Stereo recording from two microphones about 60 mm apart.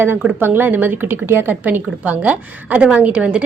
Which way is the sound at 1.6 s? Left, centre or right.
Right.